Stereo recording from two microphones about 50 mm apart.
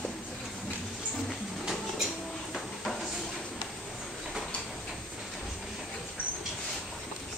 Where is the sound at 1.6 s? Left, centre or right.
Centre.